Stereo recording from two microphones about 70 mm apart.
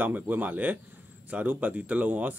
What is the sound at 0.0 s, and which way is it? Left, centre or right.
Speech, right.